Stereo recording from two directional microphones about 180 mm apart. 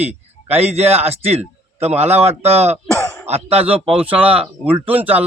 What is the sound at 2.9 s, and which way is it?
Throat clearing, 15° left (ahead or behind).